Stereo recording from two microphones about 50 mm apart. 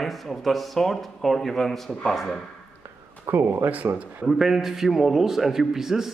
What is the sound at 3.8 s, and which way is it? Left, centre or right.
Speech, right.